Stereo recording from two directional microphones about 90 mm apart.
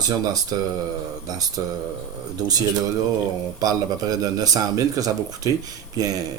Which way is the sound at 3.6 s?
45° right (ahead or behind).